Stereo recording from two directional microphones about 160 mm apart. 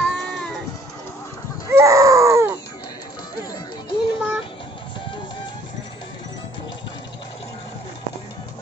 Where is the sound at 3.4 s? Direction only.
25° left (ahead or behind).